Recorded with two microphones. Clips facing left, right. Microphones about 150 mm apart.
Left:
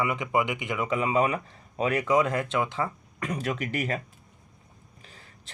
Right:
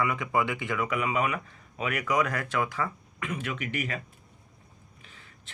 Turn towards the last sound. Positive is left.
turn(degrees=40)  # may be behind; listen again after turning